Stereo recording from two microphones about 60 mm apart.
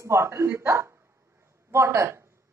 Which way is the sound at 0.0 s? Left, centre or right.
Right.